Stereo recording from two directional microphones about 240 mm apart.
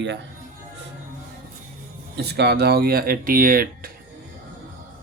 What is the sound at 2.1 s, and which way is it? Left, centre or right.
Speech, right.